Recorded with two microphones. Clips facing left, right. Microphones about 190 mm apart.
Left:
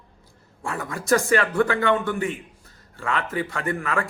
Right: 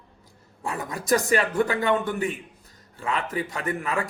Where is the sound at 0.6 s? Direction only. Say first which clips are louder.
Left 1 dB; 20° right (ahead or behind).